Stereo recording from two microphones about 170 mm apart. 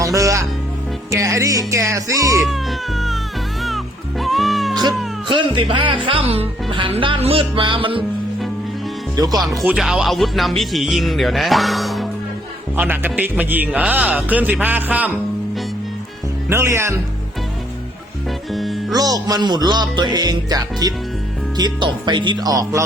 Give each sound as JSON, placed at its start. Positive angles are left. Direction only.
{"t": 0.0, "sound": "music", "side_deg": -20}
{"t": 2.4, "sound": "cat", "side_deg": 0}
{"t": 3.6, "sound": "music", "side_deg": 0}
{"t": 4.7, "sound": "cat", "side_deg": -25}
{"t": 5.3, "sound": "music", "side_deg": -30}
{"t": 9.1, "sound": "music", "side_deg": -25}
{"t": 9.6, "sound": "speech", "side_deg": -5}
{"t": 12.7, "sound": "speech", "side_deg": -10}
{"t": 16.5, "sound": "speech", "side_deg": -15}
{"t": 18.3, "sound": "music", "side_deg": 0}
{"t": 18.9, "sound": "music", "side_deg": -20}